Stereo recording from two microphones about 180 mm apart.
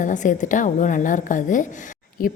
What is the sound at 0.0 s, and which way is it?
A woman's voice, 45° left (ahead or behind).